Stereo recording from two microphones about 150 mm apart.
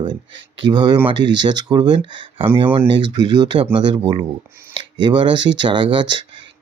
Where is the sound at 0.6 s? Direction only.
30° right (ahead or behind).